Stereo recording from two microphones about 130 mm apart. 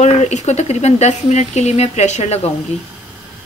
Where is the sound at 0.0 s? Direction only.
60° left (ahead or behind).